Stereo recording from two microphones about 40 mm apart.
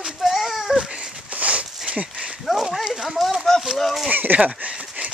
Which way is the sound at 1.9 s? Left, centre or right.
Right.